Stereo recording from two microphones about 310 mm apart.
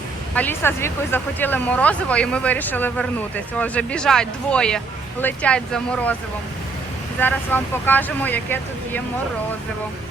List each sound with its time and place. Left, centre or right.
0.3 s speech: centre
7.2 s speech: centre